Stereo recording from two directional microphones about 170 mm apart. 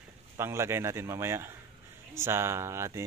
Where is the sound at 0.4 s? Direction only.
15° right (ahead or behind).